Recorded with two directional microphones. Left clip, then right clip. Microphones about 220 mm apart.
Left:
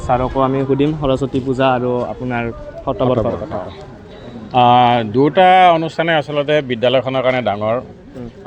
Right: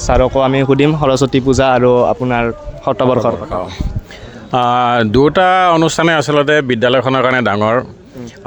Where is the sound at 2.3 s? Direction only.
30° right (ahead or behind).